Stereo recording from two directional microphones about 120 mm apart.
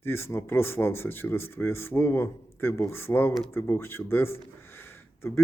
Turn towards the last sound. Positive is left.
turn(degrees=20)  # may be behind; listen again after turning